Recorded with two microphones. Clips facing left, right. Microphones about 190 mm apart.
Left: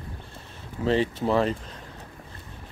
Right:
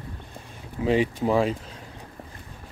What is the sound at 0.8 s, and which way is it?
Speech, 10° right (ahead or behind).